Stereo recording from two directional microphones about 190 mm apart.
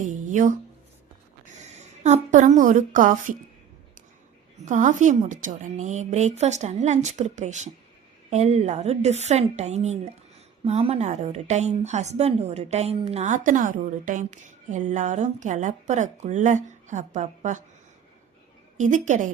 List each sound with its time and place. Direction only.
0.0 s a sound: 40° right (ahead or behind)
1.6 s speech: 35° right (ahead or behind)
4.6 s speech: 40° right (ahead or behind)
18.8 s speech: 40° right (ahead or behind)